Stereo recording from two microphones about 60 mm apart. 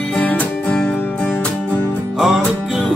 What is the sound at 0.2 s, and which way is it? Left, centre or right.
Music, left.